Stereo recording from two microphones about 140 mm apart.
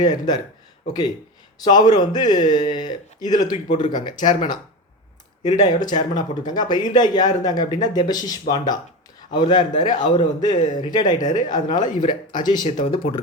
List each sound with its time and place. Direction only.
0.0 s speech: 30° left (ahead or behind)
1.5 s speech: 30° left (ahead or behind)
5.5 s a man's voice: 30° left (ahead or behind)
12.6 s a man's voice: 45° left (ahead or behind)